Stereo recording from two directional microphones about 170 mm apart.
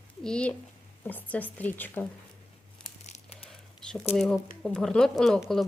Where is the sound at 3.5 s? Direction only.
Centre (ahead or behind).